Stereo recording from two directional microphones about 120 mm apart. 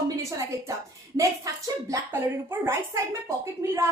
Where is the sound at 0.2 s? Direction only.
25° right (ahead or behind).